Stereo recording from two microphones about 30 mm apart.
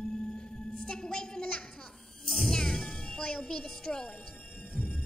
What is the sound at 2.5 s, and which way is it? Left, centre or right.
Music, left.